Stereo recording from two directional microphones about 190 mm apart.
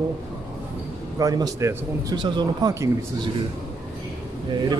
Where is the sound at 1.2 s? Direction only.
20° right (ahead or behind).